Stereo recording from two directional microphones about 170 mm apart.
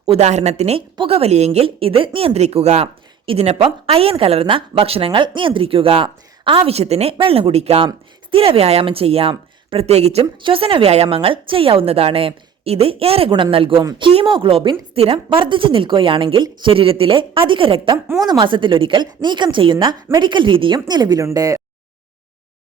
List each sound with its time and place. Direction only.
0.0 s a woman's voice: 35° right (ahead or behind); by 21.6 s 20° right (ahead or behind)